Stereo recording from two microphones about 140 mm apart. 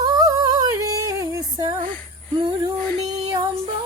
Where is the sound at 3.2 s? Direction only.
30° right (ahead or behind).